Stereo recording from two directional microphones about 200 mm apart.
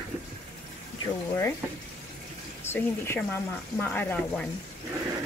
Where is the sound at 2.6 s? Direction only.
10° left (ahead or behind).